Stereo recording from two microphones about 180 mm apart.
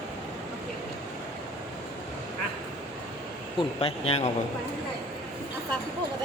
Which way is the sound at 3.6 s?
30° left (ahead or behind).